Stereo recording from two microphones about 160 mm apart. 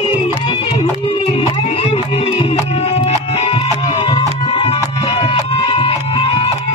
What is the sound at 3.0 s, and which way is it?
Music, 40° left (ahead or behind).